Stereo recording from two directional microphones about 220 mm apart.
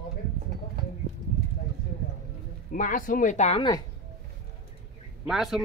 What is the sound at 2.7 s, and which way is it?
Speech, 35° left (ahead or behind).